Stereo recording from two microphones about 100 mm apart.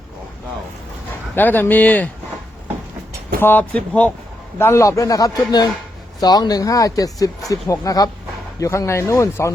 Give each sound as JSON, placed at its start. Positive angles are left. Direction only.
{"t": 1.4, "sound": "speech", "side_deg": 20}
{"t": 3.4, "sound": "speech", "side_deg": 15}
{"t": 4.5, "sound": "speech", "side_deg": 25}